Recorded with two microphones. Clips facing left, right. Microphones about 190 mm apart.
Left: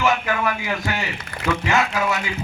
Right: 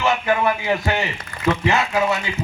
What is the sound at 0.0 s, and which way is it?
A man's voice, 30° right (ahead or behind).